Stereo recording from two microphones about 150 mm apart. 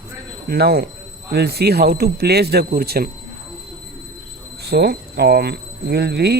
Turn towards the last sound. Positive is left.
turn(degrees=-90)